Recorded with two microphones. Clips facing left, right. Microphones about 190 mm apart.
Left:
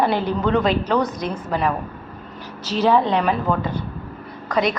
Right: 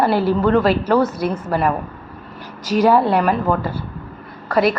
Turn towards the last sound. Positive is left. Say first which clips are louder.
# right 4 dB
turn(degrees=-5)  # may be behind; listen again after turning